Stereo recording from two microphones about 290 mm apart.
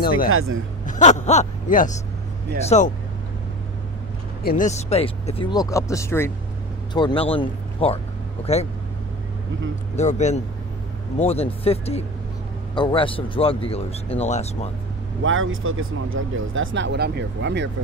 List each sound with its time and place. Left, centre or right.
0.3 s speech: right
0.8 s speech: left
4.4 s speech: left
9.9 s speech: left
15.2 s speech: right